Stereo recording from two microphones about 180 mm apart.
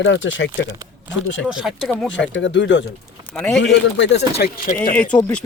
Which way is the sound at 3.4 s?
Centre (ahead or behind).